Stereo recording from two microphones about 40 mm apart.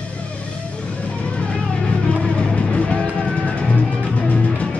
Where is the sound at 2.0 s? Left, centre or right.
Centre.